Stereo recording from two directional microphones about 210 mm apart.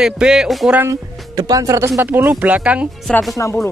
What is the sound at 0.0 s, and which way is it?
Speech, 5° right (ahead or behind).